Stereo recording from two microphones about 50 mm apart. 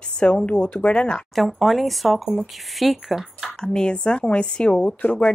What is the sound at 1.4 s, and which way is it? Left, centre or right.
Speech, centre.